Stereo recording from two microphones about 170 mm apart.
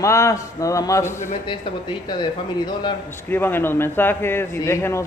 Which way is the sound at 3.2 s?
10° left (ahead or behind).